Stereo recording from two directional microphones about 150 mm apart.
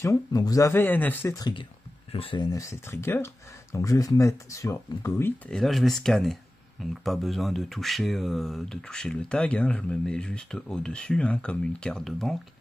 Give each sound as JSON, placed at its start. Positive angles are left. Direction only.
{"t": 0.0, "sound": "speech", "side_deg": 20}
{"t": 1.3, "sound": "speech", "side_deg": 30}
{"t": 5.5, "sound": "speech", "side_deg": 0}